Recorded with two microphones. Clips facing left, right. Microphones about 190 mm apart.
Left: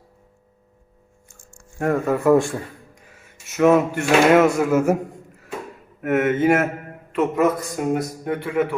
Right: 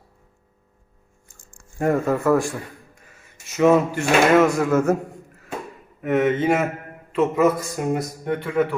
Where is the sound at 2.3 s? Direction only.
25° left (ahead or behind).